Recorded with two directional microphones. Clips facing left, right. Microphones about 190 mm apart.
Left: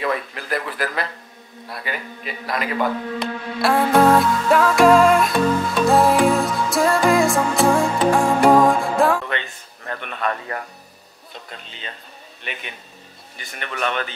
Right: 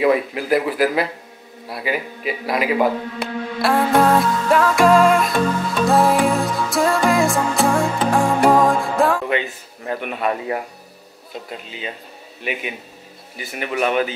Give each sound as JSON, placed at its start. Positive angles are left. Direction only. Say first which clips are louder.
{"t": 0.0, "sound": "a man's voice", "louder": "right 8 dB", "side_deg": -10}
{"t": 5.9, "sound": "music", "louder": "even", "side_deg": 0}
{"t": 11.3, "sound": "speech", "louder": "right 7 dB", "side_deg": -5}